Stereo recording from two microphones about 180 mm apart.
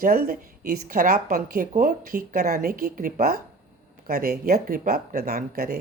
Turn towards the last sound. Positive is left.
turn(degrees=-60)  # may be behind; listen again after turning